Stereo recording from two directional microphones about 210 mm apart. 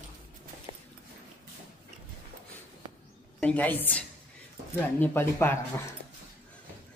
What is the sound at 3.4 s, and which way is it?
Speech, 5° left (ahead or behind).